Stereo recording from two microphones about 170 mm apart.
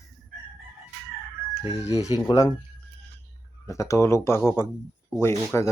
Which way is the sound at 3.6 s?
20° left (ahead or behind).